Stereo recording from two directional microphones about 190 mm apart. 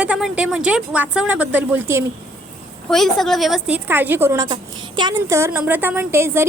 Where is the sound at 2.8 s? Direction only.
Centre (ahead or behind).